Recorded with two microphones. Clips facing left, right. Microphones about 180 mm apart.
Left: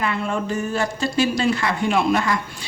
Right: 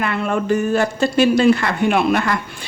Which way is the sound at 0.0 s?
60° right (ahead or behind).